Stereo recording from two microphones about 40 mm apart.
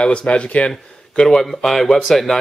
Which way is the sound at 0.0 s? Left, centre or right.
Left.